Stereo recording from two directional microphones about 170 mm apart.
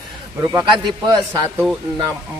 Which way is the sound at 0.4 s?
20° right (ahead or behind).